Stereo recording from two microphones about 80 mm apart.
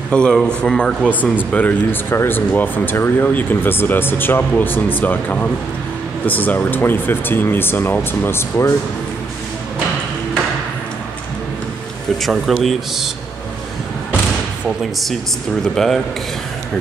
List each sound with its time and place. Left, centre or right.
0.1 s speech: centre; by 8.7 s left
12.2 s speech: centre
15.6 s speech: centre